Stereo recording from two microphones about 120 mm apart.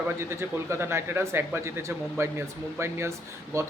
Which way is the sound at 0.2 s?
20° right (ahead or behind).